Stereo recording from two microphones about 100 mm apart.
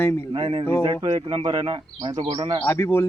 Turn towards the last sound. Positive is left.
turn(degrees=25)  # may be behind; listen again after turning